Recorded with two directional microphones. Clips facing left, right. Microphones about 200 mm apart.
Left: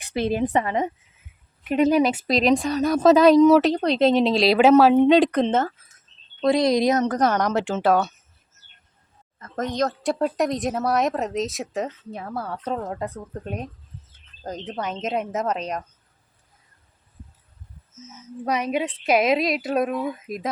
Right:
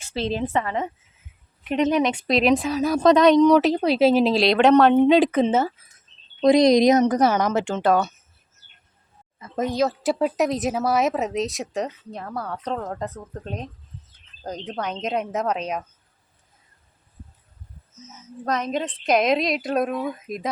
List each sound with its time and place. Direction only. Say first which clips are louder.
0.0 s speech: left 3 dB; 15° left (ahead or behind)
1.6 s speech: left 2 dB; 5° left (ahead or behind)
6.4 s a woman's voice: right 4 dB; 15° right (ahead or behind); by 8.1 s centre (ahead or behind)
9.4 s speech: right 2 dB; 10° right (ahead or behind)
18.4 s speech: left 1 dB; 10° left (ahead or behind)